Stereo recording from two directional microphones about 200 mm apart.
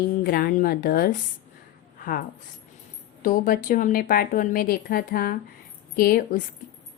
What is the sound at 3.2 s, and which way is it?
A woman's voice, 45° left (ahead or behind).